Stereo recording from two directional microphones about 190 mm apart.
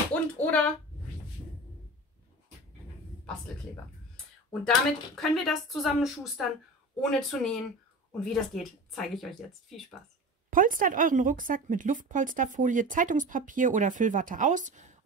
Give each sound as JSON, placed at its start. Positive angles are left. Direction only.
{"t": 0.1, "sound": "a sound", "side_deg": 10}
{"t": 4.5, "sound": "speech", "side_deg": 5}
{"t": 10.5, "sound": "a woman's voice", "side_deg": -45}